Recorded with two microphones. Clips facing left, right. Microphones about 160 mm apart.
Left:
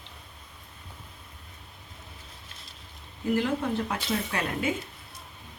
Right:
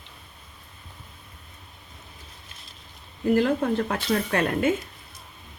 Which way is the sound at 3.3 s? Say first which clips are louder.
Right 5 dB; 50° right (ahead or behind).